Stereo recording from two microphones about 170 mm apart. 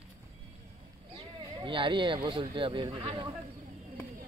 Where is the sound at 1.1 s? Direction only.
30° right (ahead or behind).